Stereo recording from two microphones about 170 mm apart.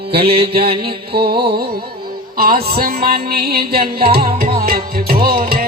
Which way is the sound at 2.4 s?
65° right (ahead or behind).